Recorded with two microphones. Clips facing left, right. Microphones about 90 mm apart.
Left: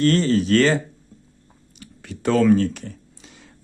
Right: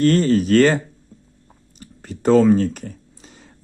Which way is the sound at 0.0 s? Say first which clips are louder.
Right 2 dB; 45° right (ahead or behind).